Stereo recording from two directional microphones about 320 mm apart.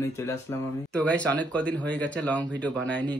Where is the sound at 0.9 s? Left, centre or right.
Centre.